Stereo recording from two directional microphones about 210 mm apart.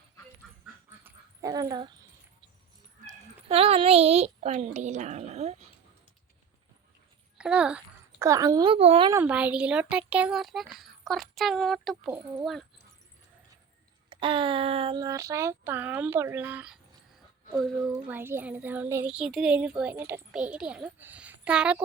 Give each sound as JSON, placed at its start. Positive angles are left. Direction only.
{"t": 0.6, "sound": "dog", "side_deg": -10}
{"t": 3.1, "sound": "a child's voice", "side_deg": -30}
{"t": 7.3, "sound": "a child's voice", "side_deg": -5}
{"t": 8.2, "sound": "a woman's voice", "side_deg": -15}
{"t": 9.1, "sound": "a child's voice", "side_deg": -5}
{"t": 14.1, "sound": "speech", "side_deg": -25}
{"t": 17.9, "sound": "a child's voice", "side_deg": -10}